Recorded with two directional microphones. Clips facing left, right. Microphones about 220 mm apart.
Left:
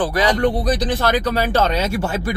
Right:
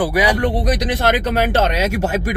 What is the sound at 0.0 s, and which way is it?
Speech, 10° right (ahead or behind).